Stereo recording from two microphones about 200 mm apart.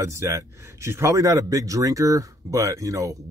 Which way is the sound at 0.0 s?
15° right (ahead or behind).